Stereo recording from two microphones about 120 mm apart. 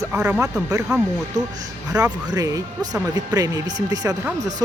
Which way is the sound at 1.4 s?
30° right (ahead or behind).